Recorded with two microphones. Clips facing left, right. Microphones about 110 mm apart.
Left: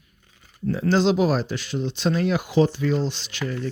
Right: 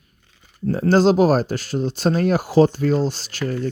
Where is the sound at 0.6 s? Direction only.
40° right (ahead or behind).